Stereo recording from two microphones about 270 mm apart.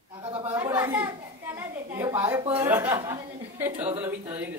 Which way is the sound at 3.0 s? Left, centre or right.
Centre.